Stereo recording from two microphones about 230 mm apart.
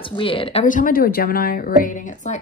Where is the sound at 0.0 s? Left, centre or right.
Left.